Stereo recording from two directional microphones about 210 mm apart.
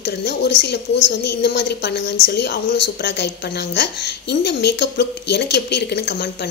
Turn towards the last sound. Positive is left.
turn(degrees=50)  # may be behind; listen again after turning